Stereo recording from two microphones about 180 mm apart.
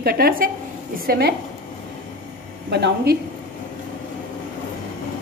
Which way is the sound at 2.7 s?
65° right (ahead or behind).